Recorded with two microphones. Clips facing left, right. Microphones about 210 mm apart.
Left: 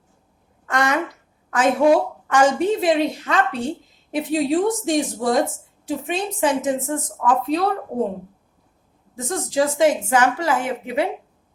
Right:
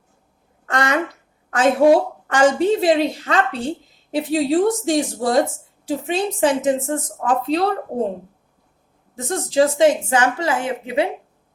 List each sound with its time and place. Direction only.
1.5 s a woman's voice: 30° right (ahead or behind)
9.3 s a woman's voice: 30° right (ahead or behind)